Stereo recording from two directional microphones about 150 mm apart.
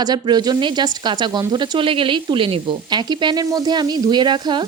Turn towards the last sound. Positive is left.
turn(degrees=-30)  # may be behind; listen again after turning